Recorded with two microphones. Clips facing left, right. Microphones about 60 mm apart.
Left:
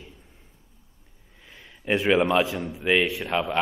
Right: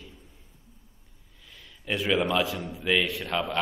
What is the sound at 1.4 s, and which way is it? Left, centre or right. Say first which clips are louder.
A man's voice: left 6 dB; left.